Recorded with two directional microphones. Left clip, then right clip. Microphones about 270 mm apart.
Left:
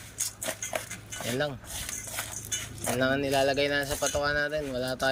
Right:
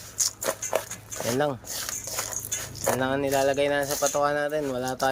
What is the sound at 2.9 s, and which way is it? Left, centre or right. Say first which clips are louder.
Speech: even; centre.